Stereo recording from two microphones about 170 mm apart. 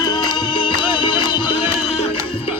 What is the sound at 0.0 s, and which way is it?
Music, 25° left (ahead or behind).